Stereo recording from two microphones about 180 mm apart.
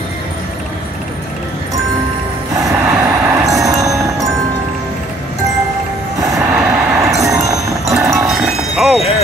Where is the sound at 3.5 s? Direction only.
20° right (ahead or behind).